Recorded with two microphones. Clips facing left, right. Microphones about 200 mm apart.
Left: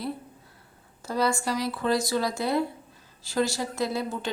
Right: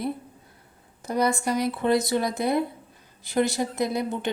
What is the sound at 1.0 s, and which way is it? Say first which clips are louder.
Speech: right 2 dB; 20° right (ahead or behind).